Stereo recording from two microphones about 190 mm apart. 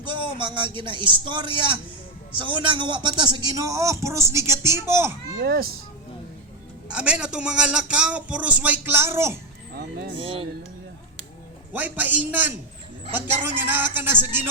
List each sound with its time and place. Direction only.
0.1 s a man's voice: 25° right (ahead or behind)
5.4 s speech: 55° right (ahead or behind)
6.9 s a man's voice: 5° right (ahead or behind)
10.2 s a man's voice: 25° right (ahead or behind)
11.7 s a man's voice: 10° right (ahead or behind)